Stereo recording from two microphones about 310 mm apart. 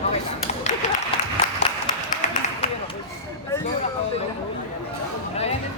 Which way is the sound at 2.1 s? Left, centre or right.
Left.